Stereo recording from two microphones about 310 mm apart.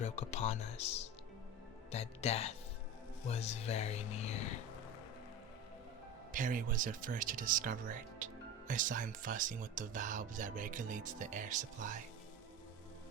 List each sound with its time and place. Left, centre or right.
0.0 s speech: left
6.3 s speech: right